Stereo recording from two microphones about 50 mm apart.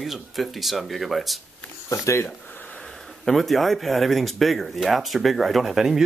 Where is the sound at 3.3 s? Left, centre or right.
Centre.